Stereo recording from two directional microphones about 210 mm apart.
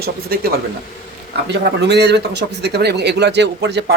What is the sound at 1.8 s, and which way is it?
Speech, 55° right (ahead or behind).